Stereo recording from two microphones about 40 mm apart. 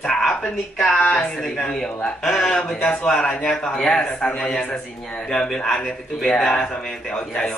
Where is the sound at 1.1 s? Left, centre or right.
Centre.